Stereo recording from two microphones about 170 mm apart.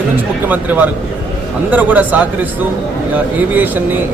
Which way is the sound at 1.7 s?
10° right (ahead or behind).